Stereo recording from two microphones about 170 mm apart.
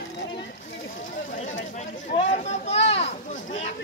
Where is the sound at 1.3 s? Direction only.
50° left (ahead or behind).